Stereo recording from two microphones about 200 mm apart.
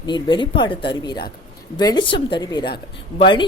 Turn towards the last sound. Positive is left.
turn(degrees=25)  # may be behind; listen again after turning